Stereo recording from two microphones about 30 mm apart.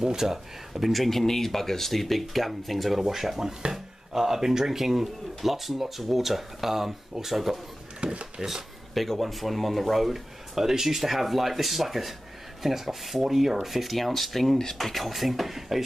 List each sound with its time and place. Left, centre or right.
0.0 s speech: centre
0.9 s speech: centre
3.0 s speech: centre
8.0 s speech: right
8.9 s speech: centre